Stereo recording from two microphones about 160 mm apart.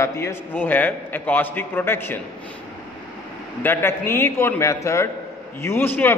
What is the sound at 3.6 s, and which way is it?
A man's voice, 15° left (ahead or behind).